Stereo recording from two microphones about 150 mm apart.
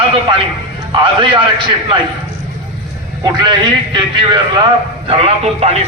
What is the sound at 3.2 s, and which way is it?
A man's voice, 30° right (ahead or behind).